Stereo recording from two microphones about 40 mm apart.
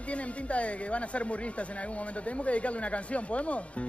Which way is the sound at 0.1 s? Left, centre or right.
Left.